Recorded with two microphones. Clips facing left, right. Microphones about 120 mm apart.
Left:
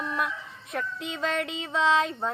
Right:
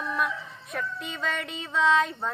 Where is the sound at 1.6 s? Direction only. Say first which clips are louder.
Right 2 dB; 25° left (ahead or behind).